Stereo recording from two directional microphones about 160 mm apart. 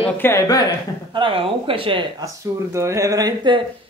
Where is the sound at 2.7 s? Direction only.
20° right (ahead or behind).